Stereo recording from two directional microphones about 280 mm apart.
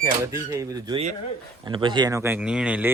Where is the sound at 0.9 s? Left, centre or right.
Right.